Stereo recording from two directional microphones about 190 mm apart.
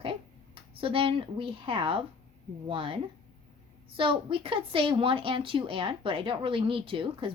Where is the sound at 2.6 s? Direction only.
30° right (ahead or behind).